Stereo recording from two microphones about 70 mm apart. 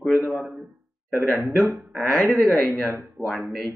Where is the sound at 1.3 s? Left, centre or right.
Centre.